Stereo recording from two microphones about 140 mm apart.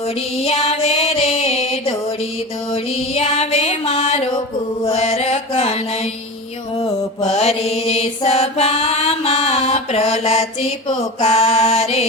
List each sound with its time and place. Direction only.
0.4 s music: 50° left (ahead or behind)
3.2 s music: 50° left (ahead or behind)
6.8 s mantra: 50° left (ahead or behind)